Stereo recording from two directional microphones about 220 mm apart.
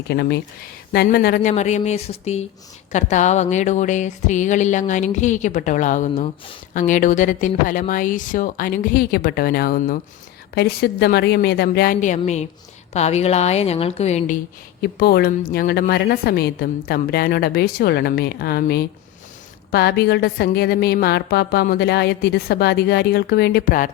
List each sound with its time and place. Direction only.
0.1 s a woman's voice: 45° left (ahead or behind); by 14.3 s 30° left (ahead or behind)
14.8 s a woman's voice: 45° left (ahead or behind)